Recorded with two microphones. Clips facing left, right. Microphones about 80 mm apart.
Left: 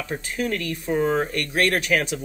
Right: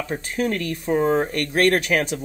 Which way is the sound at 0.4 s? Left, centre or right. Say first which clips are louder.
Right 3 dB; right.